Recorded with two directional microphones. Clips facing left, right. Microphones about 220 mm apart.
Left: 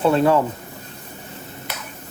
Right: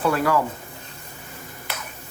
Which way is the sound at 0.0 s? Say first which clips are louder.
Left 5 dB; 25° left (ahead or behind).